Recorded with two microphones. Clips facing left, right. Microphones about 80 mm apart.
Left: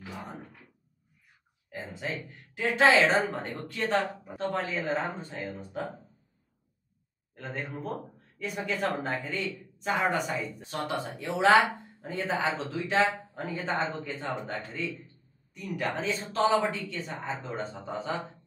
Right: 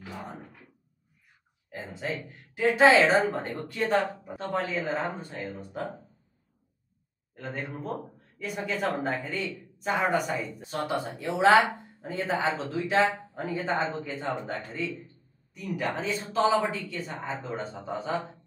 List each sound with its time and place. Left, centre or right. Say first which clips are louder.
0.4 s speech: even; centre
1.9 s speech: right 3 dB; centre
2.9 s a woman's voice: right 2 dB; centre
4.0 s speech: even; centre
7.3 s speech: right 1 dB; centre
15.5 s speech: right 1 dB; centre